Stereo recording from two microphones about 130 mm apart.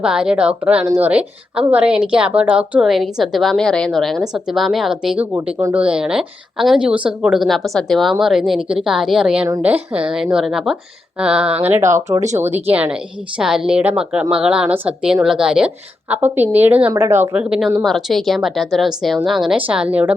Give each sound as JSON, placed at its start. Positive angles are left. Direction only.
{"t": 0.0, "sound": "a woman's voice", "side_deg": -5}
{"t": 5.2, "sound": "speech", "side_deg": -15}
{"t": 5.7, "sound": "a woman's voice", "side_deg": -10}